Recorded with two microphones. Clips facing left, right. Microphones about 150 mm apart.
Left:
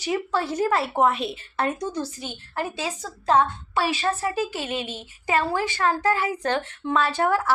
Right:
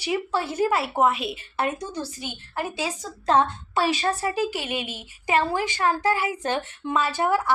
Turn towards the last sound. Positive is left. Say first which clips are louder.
# left 1 dB
turn(degrees=-10)  # may be behind; listen again after turning